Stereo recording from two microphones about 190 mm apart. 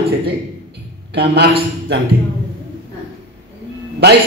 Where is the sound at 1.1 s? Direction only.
60° right (ahead or behind).